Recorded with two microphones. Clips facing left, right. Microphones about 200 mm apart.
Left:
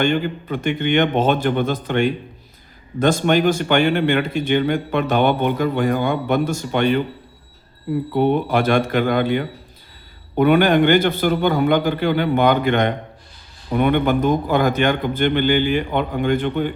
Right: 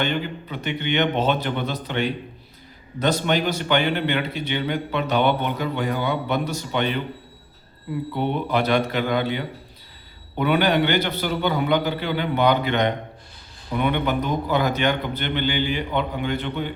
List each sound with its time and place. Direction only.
0.0 s a man's voice: 50° left (ahead or behind)
8.1 s a man's voice: 50° left (ahead or behind)